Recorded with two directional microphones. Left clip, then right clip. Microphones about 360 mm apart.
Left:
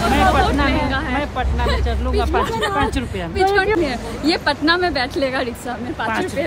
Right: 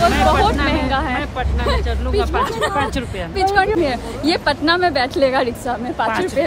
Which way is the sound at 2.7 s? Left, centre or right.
Centre.